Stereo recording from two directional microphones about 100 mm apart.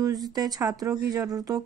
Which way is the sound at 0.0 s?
40° right (ahead or behind).